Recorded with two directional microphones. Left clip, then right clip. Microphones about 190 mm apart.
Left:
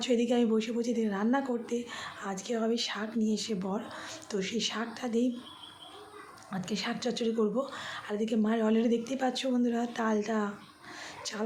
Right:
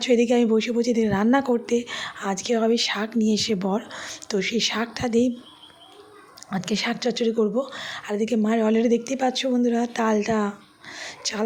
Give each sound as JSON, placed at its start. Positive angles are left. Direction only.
{"t": 0.0, "sound": "a woman's voice", "side_deg": -35}
{"t": 6.5, "sound": "speech", "side_deg": -40}